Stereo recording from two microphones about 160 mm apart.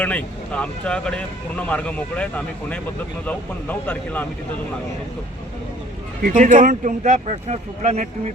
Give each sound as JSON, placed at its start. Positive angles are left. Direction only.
{"t": 0.0, "sound": "speech", "side_deg": 10}
{"t": 6.2, "sound": "speech", "side_deg": -50}